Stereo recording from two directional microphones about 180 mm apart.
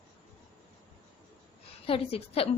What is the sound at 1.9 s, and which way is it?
Speech, 30° left (ahead or behind).